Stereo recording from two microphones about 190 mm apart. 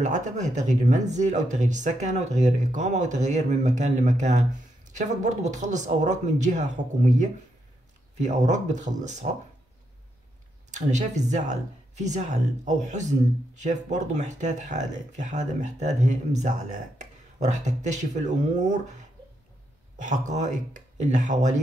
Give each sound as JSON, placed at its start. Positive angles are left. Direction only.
{"t": 0.0, "sound": "speech", "side_deg": -40}
{"t": 10.7, "sound": "speech", "side_deg": -40}